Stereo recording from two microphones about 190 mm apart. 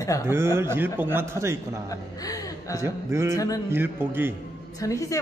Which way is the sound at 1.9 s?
20° left (ahead or behind).